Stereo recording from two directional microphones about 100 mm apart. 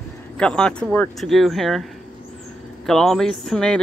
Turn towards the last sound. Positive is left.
turn(degrees=5)  # may be behind; listen again after turning